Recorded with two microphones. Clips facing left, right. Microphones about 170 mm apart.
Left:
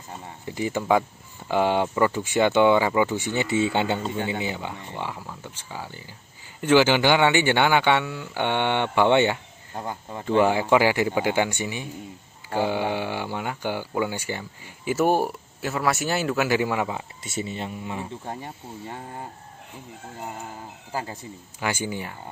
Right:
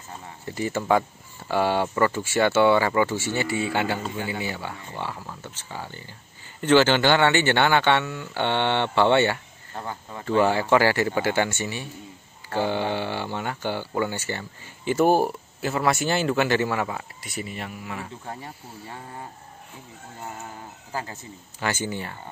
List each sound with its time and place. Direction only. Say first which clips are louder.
0.5 s a man's voice: even; 15° left (ahead or behind)
14.9 s a man's voice: right 2 dB; centre (ahead or behind); by 18.9 s 20° left (ahead or behind)
20.9 s a man's voice: left 2 dB; 10° left (ahead or behind)